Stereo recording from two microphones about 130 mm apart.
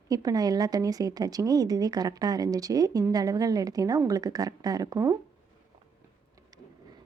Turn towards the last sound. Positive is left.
turn(degrees=-25)  # may be behind; listen again after turning